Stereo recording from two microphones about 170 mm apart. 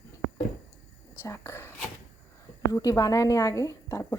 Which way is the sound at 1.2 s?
15° left (ahead or behind).